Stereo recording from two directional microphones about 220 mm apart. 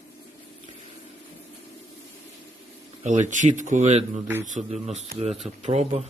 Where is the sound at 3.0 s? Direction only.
35° right (ahead or behind).